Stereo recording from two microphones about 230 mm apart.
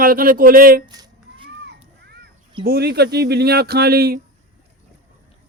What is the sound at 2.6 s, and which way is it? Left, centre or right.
Speech, right.